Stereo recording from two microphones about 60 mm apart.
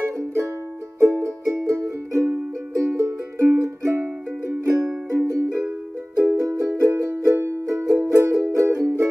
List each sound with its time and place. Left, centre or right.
0.9 s music: right
6.1 s music: right
6.4 s music: right